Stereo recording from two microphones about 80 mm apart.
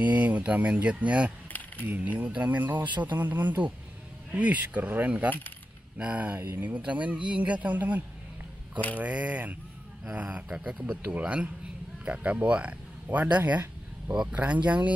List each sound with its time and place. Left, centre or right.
0.0 s speech: centre
1.5 s a sound: left
1.9 s speech: centre